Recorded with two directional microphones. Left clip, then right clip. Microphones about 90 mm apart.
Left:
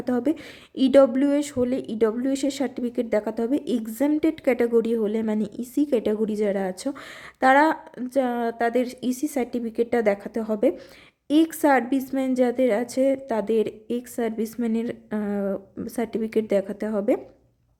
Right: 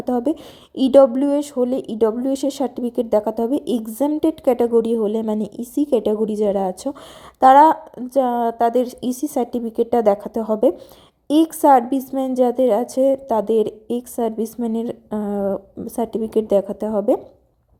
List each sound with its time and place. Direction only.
0.0 s a woman's voice: 20° right (ahead or behind)
15.2 s speech: 10° right (ahead or behind)
15.4 s speech: 10° left (ahead or behind)
16.0 s a woman's voice: 20° right (ahead or behind)